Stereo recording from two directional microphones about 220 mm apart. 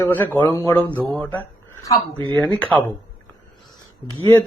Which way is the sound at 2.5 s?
5° left (ahead or behind).